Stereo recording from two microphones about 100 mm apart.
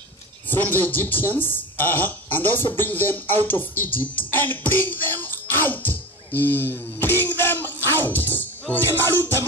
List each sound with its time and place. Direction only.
0.5 s a woman's voice: 20° left (ahead or behind)
4.3 s music: 20° left (ahead or behind)